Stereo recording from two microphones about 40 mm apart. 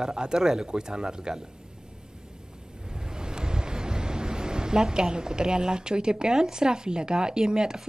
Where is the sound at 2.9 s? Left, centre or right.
Centre.